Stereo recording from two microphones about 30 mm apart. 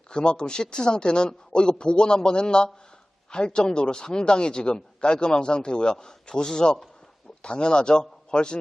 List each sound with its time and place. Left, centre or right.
0.1 s a man's voice: left